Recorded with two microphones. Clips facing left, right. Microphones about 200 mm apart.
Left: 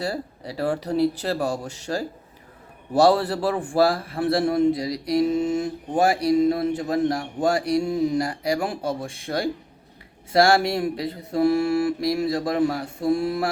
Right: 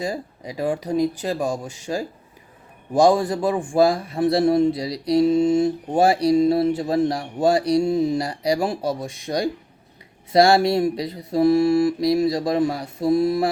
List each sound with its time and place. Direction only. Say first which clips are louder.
0.0 s speech: right 1 dB; 15° right (ahead or behind)
3.7 s mantra: right 3 dB; 15° right (ahead or behind)